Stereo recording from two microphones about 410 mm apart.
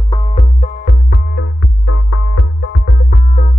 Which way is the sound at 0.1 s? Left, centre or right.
Centre.